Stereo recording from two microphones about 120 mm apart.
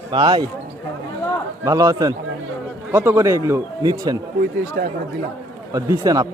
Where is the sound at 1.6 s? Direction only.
30° right (ahead or behind).